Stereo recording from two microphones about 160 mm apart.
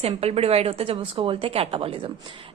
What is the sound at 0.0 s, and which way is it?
Speech, 40° right (ahead or behind).